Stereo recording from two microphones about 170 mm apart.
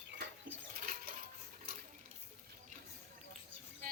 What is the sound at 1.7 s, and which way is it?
Stir, 55° right (ahead or behind).